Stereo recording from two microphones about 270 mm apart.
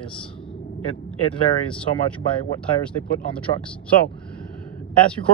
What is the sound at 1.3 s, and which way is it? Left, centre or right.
Speech, centre.